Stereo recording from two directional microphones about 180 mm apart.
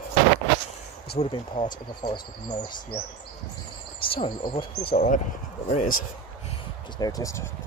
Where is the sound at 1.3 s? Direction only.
25° left (ahead or behind).